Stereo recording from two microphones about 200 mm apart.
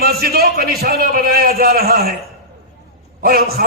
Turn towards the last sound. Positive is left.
turn(degrees=-50)  # may be behind; listen again after turning